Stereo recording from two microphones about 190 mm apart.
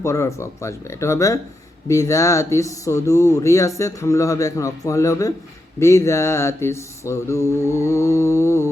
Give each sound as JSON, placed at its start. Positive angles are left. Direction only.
{"t": 0.0, "sound": "speech", "side_deg": 15}